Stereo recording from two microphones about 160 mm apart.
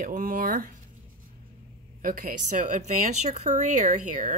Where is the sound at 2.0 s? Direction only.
60° right (ahead or behind).